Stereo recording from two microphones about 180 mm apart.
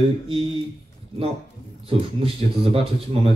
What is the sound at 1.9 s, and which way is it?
Speech, 30° right (ahead or behind).